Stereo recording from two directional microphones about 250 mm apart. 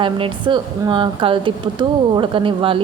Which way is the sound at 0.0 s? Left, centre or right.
Centre.